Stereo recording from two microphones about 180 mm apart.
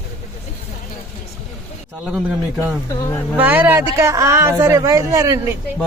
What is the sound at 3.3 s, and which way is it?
Speech, 10° right (ahead or behind).